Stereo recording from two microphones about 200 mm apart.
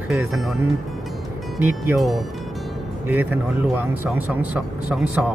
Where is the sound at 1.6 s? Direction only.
5° right (ahead or behind).